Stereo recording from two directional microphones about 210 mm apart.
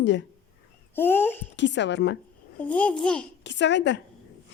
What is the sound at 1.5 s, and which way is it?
Speech, 55° left (ahead or behind).